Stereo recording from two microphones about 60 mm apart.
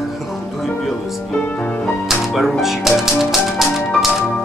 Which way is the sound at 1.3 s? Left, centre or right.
Left.